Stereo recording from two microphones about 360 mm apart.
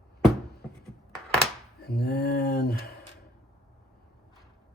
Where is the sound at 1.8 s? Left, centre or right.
Left.